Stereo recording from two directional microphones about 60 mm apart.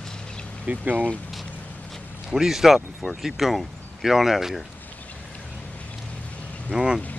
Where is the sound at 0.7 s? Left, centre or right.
Right.